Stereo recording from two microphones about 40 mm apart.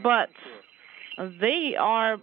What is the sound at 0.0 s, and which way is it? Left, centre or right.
Speech, right.